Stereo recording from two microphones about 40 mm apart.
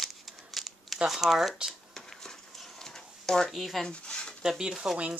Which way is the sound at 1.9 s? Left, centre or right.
Centre.